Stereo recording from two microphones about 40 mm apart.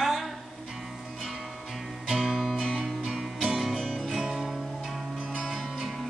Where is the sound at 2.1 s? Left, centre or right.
Centre.